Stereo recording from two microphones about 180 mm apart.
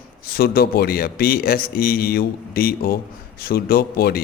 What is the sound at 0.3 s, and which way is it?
A man's voice, 60° left (ahead or behind).